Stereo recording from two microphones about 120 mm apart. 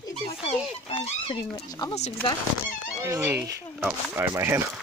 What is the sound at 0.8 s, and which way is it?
Speech, 55° left (ahead or behind).